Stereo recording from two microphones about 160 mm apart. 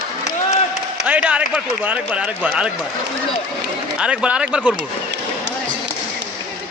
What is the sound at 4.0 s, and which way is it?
Speech, 5° right (ahead or behind).